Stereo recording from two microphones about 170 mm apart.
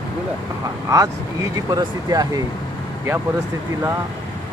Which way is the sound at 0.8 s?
20° right (ahead or behind).